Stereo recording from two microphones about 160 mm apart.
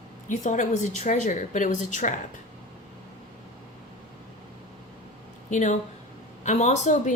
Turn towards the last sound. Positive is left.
turn(degrees=50)  # may be behind; listen again after turning